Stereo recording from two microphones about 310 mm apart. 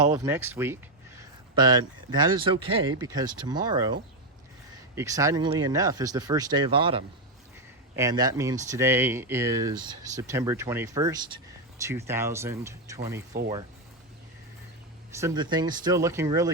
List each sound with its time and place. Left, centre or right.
0.1 s speech: centre
4.9 s speech: centre
15.1 s speech: centre